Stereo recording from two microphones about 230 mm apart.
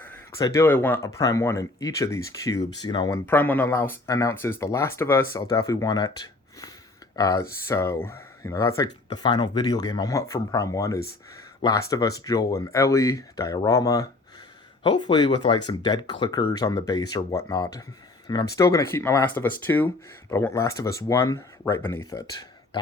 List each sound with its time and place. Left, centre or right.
0.0 s speech: centre